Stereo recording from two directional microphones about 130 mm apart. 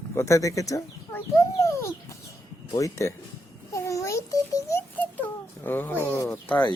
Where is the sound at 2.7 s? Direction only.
25° left (ahead or behind).